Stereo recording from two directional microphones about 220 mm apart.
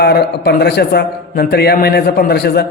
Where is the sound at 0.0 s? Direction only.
45° left (ahead or behind).